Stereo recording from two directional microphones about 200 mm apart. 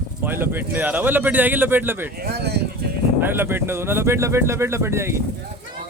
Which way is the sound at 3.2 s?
10° right (ahead or behind).